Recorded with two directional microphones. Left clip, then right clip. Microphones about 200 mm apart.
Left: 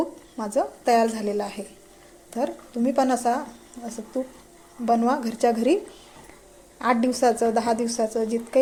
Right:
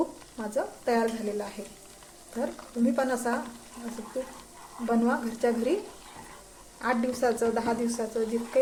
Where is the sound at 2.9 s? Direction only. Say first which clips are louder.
Left 8 dB; 25° left (ahead or behind).